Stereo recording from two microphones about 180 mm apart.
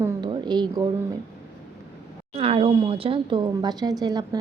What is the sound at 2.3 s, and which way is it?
A woman's voice, 35° right (ahead or behind).